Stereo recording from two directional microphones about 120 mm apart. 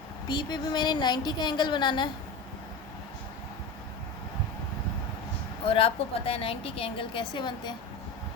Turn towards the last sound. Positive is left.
turn(degrees=40)  # may be behind; listen again after turning